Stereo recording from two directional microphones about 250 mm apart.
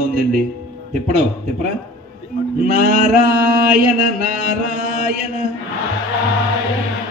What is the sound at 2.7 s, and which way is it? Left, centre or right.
Male singing, right.